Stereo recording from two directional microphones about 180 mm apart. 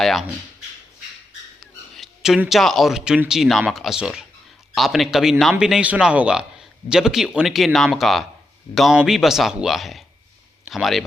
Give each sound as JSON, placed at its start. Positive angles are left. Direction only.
{"t": 0.0, "sound": "speech", "side_deg": 0}
{"t": 2.0, "sound": "speech", "side_deg": 0}